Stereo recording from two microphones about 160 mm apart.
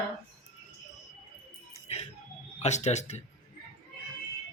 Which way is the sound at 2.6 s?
45° left (ahead or behind).